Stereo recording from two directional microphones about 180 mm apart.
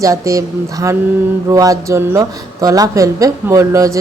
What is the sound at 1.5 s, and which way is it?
Speech, 20° right (ahead or behind).